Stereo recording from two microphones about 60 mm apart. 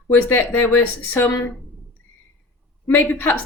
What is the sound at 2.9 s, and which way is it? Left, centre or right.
Speech, left.